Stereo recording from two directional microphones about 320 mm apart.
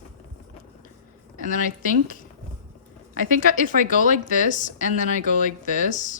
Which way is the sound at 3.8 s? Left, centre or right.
Left.